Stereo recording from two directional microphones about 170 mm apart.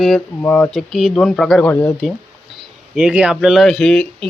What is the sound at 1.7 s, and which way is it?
Speech, 10° left (ahead or behind).